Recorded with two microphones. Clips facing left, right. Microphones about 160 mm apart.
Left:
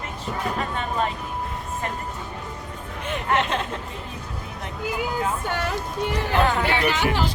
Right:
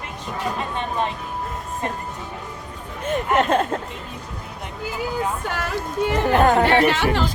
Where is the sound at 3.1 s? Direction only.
45° right (ahead or behind).